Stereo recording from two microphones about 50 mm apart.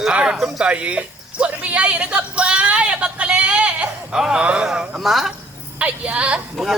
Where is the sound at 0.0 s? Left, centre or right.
Centre.